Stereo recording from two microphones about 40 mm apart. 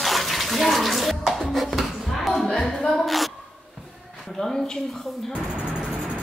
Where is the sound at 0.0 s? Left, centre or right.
Centre.